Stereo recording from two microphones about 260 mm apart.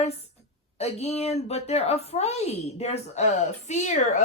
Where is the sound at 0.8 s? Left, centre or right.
Left.